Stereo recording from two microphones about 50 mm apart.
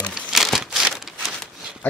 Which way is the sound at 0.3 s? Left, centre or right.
Centre.